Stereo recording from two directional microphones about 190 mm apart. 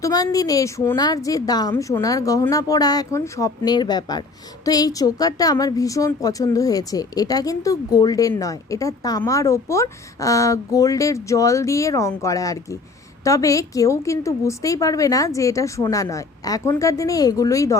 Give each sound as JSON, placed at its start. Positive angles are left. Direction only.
{"t": 0.0, "sound": "a woman's voice", "side_deg": 20}